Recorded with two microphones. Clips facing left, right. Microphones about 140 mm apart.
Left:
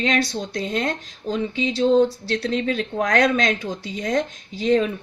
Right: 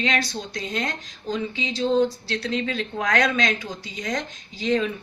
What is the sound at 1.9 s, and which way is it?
Speech, 45° left (ahead or behind).